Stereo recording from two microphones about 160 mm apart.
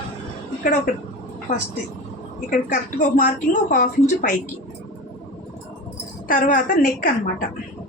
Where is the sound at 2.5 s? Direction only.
55° left (ahead or behind).